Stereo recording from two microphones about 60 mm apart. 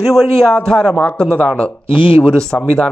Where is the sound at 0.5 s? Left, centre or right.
Centre.